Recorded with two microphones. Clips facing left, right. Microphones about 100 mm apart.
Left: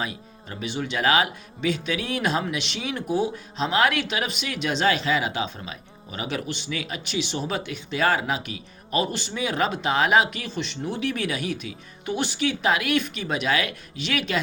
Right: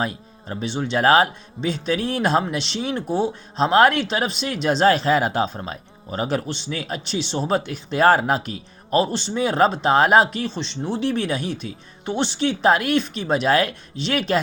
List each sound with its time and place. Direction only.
0.0 s speech: 35° right (ahead or behind)